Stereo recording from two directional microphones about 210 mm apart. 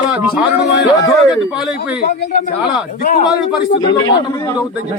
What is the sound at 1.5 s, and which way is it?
Speech, 5° right (ahead or behind).